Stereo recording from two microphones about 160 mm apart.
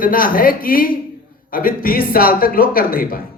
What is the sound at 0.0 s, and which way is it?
Speech, 60° left (ahead or behind).